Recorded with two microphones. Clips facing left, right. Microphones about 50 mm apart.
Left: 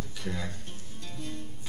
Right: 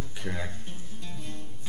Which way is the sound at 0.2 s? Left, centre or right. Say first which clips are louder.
Right 1 dB; right.